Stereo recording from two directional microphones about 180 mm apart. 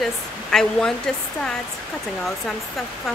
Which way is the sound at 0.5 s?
5° left (ahead or behind).